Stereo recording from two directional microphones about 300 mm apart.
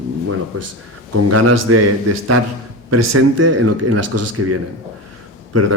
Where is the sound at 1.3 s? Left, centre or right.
Right.